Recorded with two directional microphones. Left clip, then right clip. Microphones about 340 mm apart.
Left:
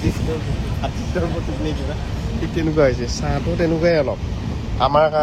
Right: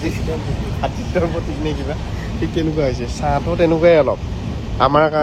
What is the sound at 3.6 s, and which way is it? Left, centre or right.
Speech, right.